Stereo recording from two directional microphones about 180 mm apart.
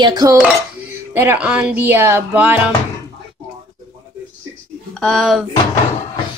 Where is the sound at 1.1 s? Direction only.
10° right (ahead or behind).